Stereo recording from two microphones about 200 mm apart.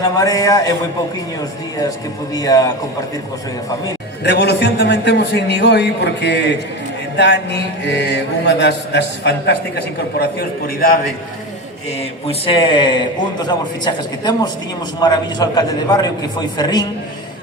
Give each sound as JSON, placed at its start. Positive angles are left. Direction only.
{"t": 0.0, "sound": "a man's voice", "side_deg": 15}
{"t": 2.3, "sound": "a man's voice", "side_deg": 20}
{"t": 4.2, "sound": "mantra", "side_deg": 55}
{"t": 10.8, "sound": "a man's voice", "side_deg": 45}
{"t": 11.9, "sound": "a man's voice", "side_deg": 30}